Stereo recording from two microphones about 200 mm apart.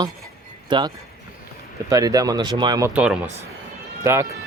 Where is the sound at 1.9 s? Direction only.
15° right (ahead or behind).